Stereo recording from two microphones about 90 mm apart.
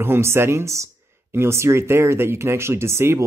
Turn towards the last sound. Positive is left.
turn(degrees=-30)  # may be behind; listen again after turning